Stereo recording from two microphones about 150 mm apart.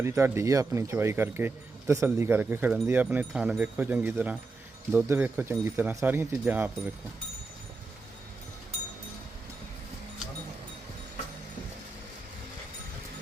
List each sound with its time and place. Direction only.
0.0 s speech: 20° right (ahead or behind)